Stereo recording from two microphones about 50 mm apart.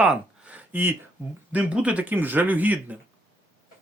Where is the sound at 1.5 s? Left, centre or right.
Right.